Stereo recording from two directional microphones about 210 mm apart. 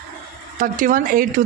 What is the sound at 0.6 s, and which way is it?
Speech, 40° right (ahead or behind).